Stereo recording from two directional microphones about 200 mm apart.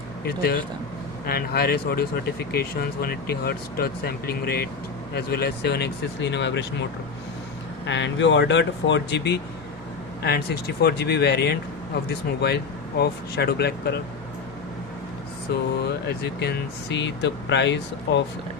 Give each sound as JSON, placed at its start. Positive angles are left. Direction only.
{"t": 0.3, "sound": "speech", "side_deg": 50}
{"t": 7.9, "sound": "speech", "side_deg": 65}
{"t": 15.8, "sound": "speech", "side_deg": 55}